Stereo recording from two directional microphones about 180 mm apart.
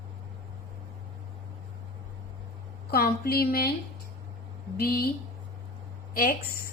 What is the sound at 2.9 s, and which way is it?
Speech, 55° left (ahead or behind).